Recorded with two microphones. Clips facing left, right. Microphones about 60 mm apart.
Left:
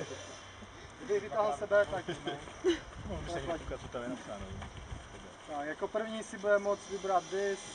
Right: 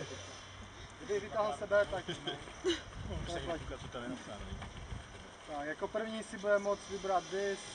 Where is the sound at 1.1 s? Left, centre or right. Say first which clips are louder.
Left 4 dB; centre.